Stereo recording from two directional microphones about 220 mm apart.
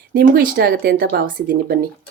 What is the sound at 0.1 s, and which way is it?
Speech, 45° right (ahead or behind).